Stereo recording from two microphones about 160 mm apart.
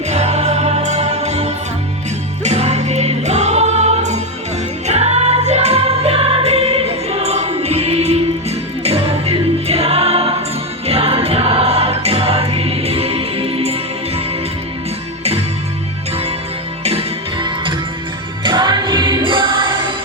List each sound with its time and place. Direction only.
0.1 s music: 45° right (ahead or behind)
15.2 s music: 40° right (ahead or behind)
16.8 s music: 40° right (ahead or behind)
17.4 s music: 30° right (ahead or behind)